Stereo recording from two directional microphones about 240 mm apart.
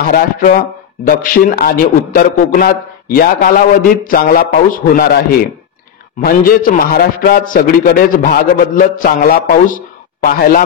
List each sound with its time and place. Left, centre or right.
0.1 s speech: left
6.2 s speech: left